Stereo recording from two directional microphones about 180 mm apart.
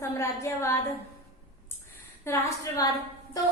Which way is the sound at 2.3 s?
15° left (ahead or behind).